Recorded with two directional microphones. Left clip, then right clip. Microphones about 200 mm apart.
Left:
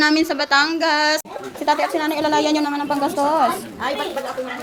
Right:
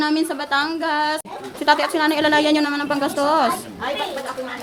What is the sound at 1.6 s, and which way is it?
Speech, 10° right (ahead or behind).